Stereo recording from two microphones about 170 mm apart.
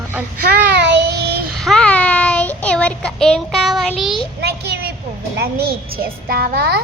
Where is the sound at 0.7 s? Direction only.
80° right.